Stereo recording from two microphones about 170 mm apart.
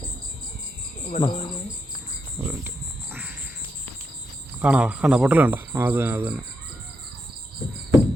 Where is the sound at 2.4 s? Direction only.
10° right (ahead or behind).